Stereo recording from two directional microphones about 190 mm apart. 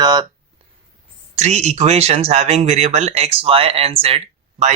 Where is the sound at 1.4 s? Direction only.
35° right (ahead or behind).